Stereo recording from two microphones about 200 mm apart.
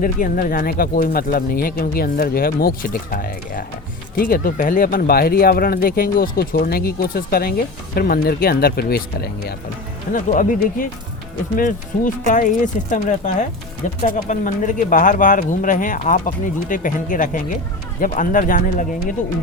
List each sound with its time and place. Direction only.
0.0 s speech: 40° left (ahead or behind)